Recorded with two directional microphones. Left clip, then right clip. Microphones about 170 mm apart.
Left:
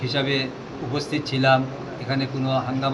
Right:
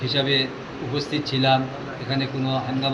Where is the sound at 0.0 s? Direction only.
15° left (ahead or behind).